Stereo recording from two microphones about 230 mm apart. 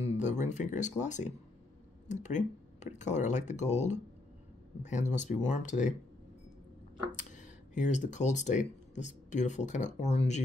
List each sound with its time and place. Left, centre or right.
0.0 s speech: left
7.1 s speech: left